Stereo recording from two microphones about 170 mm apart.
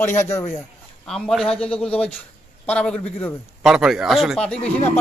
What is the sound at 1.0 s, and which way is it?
A man's voice, 5° left (ahead or behind).